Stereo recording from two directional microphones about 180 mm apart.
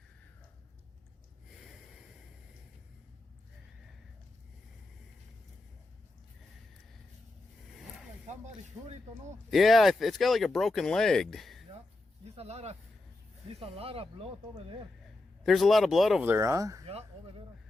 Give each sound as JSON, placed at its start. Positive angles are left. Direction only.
{"t": 8.3, "sound": "speech", "side_deg": -40}
{"t": 9.5, "sound": "speech", "side_deg": 0}
{"t": 12.2, "sound": "speech", "side_deg": -35}
{"t": 15.4, "sound": "speech", "side_deg": 0}
{"t": 16.8, "sound": "speech", "side_deg": -35}